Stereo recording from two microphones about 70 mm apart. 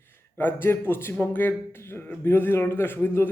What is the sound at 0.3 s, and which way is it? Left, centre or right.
A man's voice, left.